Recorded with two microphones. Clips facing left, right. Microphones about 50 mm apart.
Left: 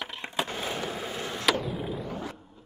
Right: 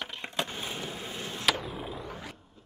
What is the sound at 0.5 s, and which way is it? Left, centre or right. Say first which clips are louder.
Skateboard: left 5 dB; centre.